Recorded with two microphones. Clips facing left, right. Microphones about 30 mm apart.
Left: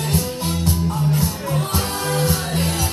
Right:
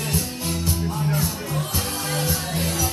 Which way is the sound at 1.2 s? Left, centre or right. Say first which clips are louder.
Left 4 dB; left.